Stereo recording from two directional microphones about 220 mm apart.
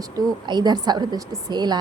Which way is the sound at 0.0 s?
20° right (ahead or behind).